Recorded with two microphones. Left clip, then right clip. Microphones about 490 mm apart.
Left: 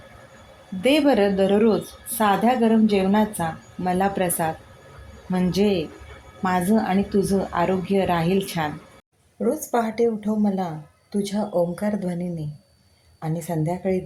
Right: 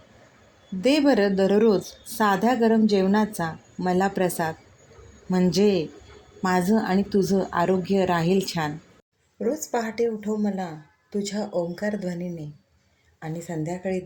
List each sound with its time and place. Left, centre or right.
0.8 s a woman's voice: left
13.2 s a woman's voice: left